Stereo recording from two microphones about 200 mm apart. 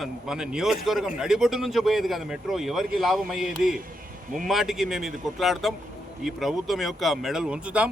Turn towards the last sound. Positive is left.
turn(degrees=-5)  # may be behind; listen again after turning